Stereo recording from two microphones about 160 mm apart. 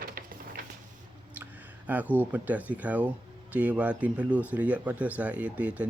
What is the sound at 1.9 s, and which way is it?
Speech, 10° right (ahead or behind).